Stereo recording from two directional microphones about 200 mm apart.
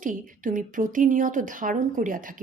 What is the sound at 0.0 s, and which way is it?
A woman's voice, 40° right (ahead or behind).